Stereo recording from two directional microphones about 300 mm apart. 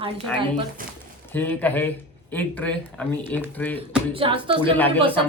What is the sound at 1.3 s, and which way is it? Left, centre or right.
Speech, centre.